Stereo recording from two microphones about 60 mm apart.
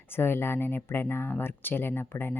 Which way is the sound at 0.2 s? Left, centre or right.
Left.